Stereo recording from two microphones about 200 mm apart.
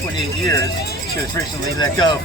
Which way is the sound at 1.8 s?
20° left (ahead or behind).